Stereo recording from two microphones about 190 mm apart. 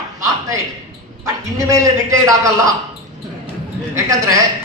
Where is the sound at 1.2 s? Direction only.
15° right (ahead or behind).